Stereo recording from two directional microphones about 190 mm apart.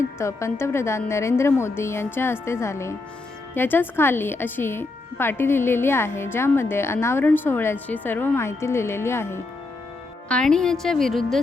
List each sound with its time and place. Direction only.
0.2 s a woman's voice: 15° left (ahead or behind)